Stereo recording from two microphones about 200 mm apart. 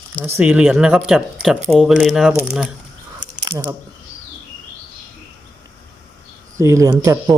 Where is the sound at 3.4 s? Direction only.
20° right (ahead or behind).